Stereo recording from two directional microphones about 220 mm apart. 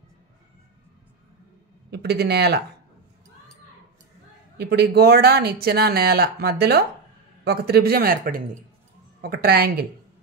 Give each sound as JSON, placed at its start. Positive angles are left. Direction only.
{"t": 1.9, "sound": "speech", "side_deg": -50}
{"t": 4.6, "sound": "speech", "side_deg": -45}